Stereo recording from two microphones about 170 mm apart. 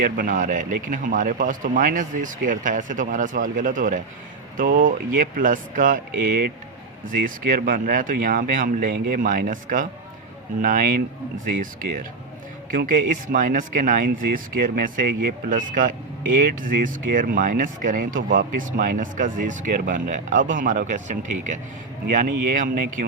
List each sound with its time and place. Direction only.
0.0 s speech: 55° right (ahead or behind)